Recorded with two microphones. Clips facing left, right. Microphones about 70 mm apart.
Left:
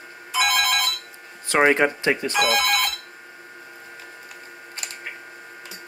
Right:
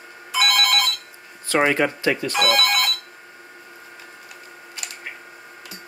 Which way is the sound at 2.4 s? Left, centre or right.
Centre.